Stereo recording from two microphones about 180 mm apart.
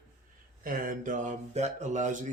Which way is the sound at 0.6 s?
50° right (ahead or behind).